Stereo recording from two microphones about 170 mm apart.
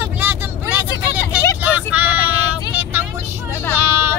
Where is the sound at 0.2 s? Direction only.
10° right (ahead or behind).